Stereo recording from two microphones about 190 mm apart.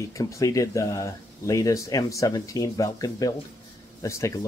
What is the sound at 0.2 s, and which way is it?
Speech, 15° left (ahead or behind).